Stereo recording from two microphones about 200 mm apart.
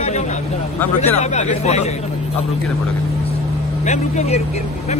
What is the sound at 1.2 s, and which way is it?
Speech, 35° left (ahead or behind).